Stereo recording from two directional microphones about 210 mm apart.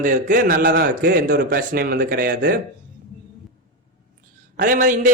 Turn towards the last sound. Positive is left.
turn(degrees=-35)  # may be behind; listen again after turning